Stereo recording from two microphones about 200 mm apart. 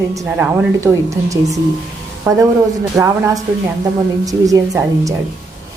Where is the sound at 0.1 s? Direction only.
15° right (ahead or behind).